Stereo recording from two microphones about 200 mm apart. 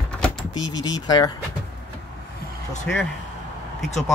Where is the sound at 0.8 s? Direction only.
20° left (ahead or behind).